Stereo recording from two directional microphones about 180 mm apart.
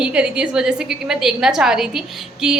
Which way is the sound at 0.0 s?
5° right (ahead or behind).